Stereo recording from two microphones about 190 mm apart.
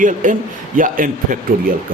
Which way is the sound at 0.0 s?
40° right (ahead or behind).